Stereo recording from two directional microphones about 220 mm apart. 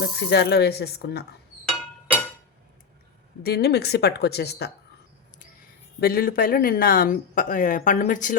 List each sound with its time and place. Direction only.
0.0 s a woman's voice: 50° left (ahead or behind)
3.4 s a woman's voice: 50° left (ahead or behind)
6.0 s speech: 45° left (ahead or behind)